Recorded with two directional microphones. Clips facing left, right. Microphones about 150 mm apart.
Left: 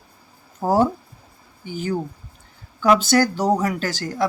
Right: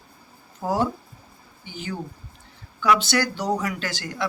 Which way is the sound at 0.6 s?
45° left (ahead or behind).